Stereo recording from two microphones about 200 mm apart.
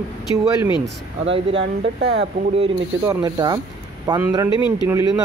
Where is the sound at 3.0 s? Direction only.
20° right (ahead or behind).